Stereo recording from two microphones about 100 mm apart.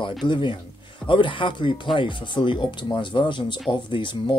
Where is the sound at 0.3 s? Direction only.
55° left (ahead or behind).